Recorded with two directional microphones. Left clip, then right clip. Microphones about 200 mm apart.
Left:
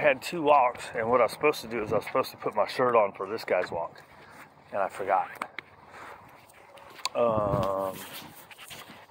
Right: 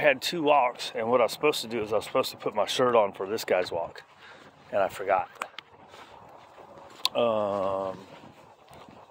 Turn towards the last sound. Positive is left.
turn(degrees=-20)  # may be behind; listen again after turning